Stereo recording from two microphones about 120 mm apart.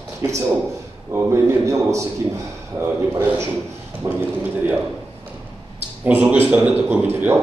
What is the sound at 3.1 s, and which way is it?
Speech, 20° right (ahead or behind).